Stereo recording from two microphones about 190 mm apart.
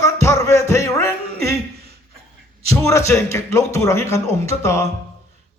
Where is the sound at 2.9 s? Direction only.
15° left (ahead or behind).